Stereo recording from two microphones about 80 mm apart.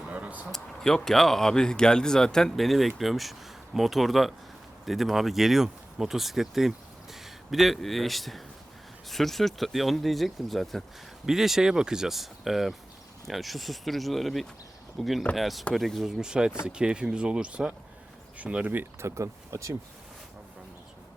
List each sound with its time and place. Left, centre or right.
0.1 s a sound: centre
0.5 s speech: centre; by 18.9 s right
19.0 s speech: right